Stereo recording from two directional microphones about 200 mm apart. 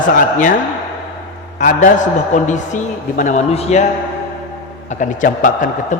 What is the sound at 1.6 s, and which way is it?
A man's voice, 40° left (ahead or behind).